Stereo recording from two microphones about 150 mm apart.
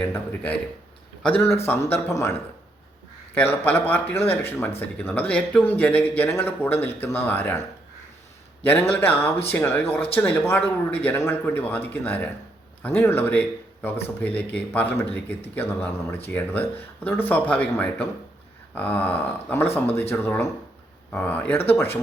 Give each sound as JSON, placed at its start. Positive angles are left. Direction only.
{"t": 0.0, "sound": "a man's voice", "side_deg": 10}
{"t": 3.3, "sound": "a man's voice", "side_deg": 15}
{"t": 8.6, "sound": "a man's voice", "side_deg": 15}